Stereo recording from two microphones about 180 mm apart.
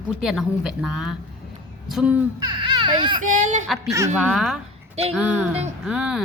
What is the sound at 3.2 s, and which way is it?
Speech, 45° right (ahead or behind).